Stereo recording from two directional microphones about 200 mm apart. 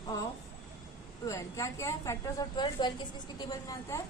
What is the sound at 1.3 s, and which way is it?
A woman's voice, 15° left (ahead or behind).